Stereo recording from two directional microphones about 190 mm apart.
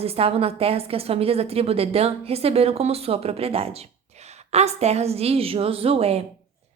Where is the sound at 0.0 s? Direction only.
30° right (ahead or behind).